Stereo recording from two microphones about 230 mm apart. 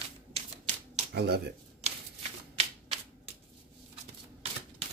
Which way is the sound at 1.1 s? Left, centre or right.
Right.